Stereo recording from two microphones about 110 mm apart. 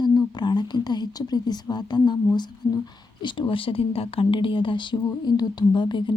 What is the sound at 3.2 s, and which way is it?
Speech, 45° left (ahead or behind).